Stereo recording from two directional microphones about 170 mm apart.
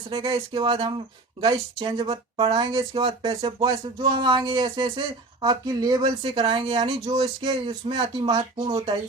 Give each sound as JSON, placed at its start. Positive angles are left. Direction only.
{"t": 0.1, "sound": "speech", "side_deg": -30}
{"t": 7.1, "sound": "speech", "side_deg": -25}